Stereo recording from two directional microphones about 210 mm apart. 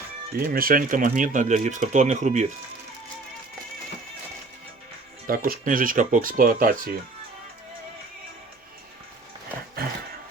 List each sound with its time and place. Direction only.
0.3 s speech: 45° right (ahead or behind)
5.2 s speech: 45° right (ahead or behind)